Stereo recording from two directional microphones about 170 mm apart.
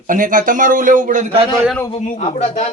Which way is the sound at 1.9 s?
40° left (ahead or behind).